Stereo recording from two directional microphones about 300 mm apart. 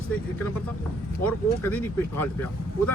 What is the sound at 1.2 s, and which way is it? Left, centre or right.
Speech, centre.